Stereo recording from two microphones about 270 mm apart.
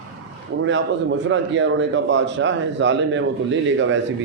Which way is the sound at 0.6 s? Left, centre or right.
Right.